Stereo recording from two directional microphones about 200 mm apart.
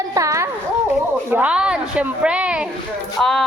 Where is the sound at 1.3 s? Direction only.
5° right (ahead or behind).